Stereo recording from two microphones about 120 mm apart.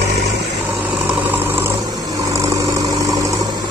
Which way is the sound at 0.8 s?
15° right (ahead or behind).